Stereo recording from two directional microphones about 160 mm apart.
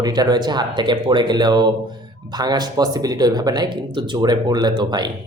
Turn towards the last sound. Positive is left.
turn(degrees=-25)  # may be behind; listen again after turning